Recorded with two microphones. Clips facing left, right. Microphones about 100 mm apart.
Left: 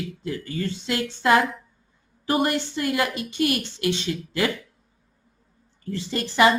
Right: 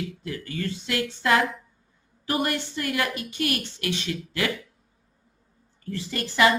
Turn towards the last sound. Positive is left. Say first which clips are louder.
# left 2 dB
turn(degrees=25)  # may be behind; listen again after turning